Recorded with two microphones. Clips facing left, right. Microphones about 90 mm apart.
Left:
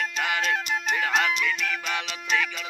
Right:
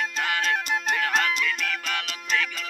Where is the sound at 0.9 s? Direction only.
15° left (ahead or behind).